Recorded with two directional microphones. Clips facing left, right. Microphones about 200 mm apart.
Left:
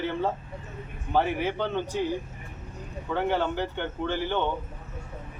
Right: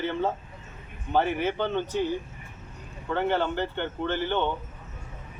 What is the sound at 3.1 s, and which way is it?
Speech, 5° left (ahead or behind).